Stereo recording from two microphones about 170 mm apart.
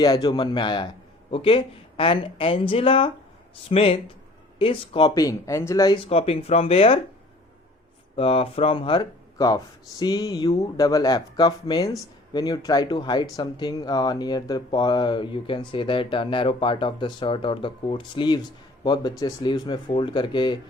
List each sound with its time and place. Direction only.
0.0 s speech: 25° left (ahead or behind)
8.1 s speech: 35° left (ahead or behind)